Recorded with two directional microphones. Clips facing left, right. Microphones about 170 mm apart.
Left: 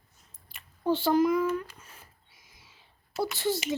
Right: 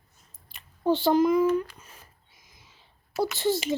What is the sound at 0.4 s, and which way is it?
Speech, 25° right (ahead or behind).